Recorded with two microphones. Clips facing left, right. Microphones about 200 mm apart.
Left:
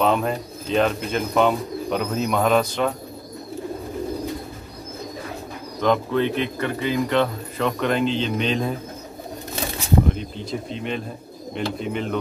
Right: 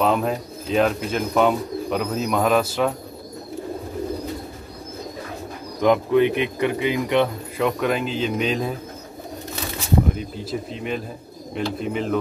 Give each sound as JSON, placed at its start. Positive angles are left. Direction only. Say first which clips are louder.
{"t": 0.0, "sound": "speech", "louder": "even", "side_deg": 0}
{"t": 5.8, "sound": "speech", "louder": "right 3 dB", "side_deg": -10}
{"t": 10.1, "sound": "speech", "louder": "right 1 dB", "side_deg": -5}